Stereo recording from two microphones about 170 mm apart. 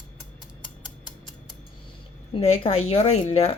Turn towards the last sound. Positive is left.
turn(degrees=35)  # may be behind; listen again after turning